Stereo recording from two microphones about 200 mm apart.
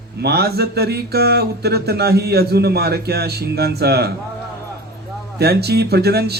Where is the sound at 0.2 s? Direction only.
55° right (ahead or behind).